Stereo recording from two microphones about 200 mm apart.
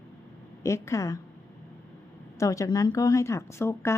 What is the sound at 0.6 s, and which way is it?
Speech, 15° left (ahead or behind).